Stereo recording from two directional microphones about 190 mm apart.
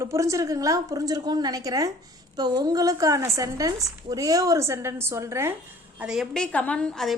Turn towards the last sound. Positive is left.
turn(degrees=0)  # may be behind; listen again after turning